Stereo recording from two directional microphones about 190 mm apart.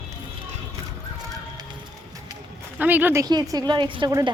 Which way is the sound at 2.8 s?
10° right (ahead or behind).